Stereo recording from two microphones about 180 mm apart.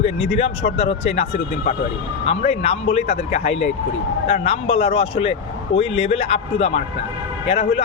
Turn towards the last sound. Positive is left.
turn(degrees=35)  # may be behind; listen again after turning